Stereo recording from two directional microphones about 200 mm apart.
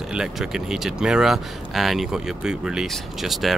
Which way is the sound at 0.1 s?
5° right (ahead or behind).